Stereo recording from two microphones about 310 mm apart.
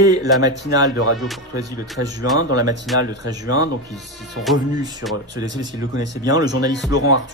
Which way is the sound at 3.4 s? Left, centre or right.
Left.